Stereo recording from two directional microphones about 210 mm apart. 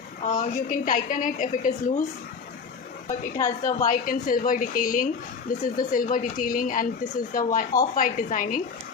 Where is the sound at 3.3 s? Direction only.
15° left (ahead or behind).